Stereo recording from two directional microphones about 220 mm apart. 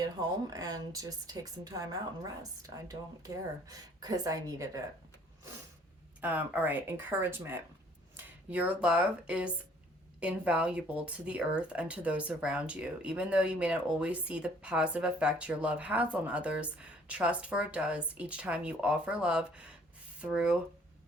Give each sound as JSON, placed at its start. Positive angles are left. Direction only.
{"t": 0.0, "sound": "speech", "side_deg": -15}
{"t": 6.2, "sound": "speech", "side_deg": -5}